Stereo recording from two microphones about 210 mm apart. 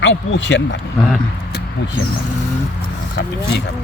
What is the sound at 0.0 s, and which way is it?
Speech, 60° left (ahead or behind).